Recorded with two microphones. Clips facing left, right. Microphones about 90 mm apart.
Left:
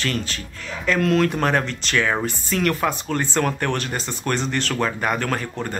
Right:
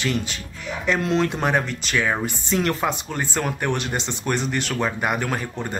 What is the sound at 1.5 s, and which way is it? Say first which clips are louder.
Speech: left 1 dB; 10° right (ahead or behind).